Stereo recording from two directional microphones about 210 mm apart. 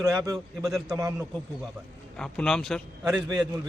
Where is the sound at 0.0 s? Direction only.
15° right (ahead or behind).